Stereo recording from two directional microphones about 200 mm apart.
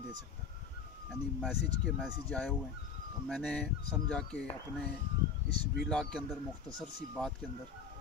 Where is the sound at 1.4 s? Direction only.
5° left (ahead or behind).